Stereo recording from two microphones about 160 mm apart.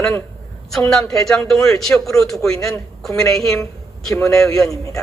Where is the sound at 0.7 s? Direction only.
5° left (ahead or behind).